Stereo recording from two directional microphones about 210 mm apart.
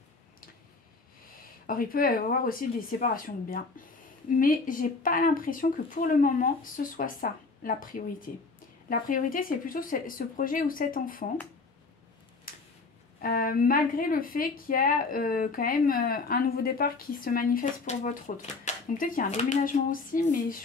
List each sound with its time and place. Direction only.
1.7 s speech: 45° left (ahead or behind)
12.5 s a sound: 40° left (ahead or behind)
13.2 s speech: 45° left (ahead or behind)